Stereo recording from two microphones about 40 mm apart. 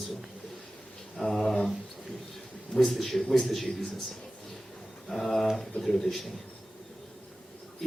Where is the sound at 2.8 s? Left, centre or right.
Centre.